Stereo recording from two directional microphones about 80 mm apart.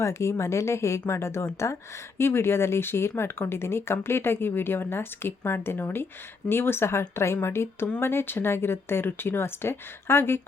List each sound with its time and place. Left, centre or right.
0.0 s speech: left